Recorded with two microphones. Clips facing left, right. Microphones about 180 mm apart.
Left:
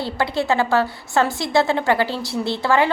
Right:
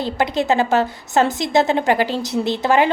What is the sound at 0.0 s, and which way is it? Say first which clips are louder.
A woman's voice: right 2 dB; 20° right (ahead or behind).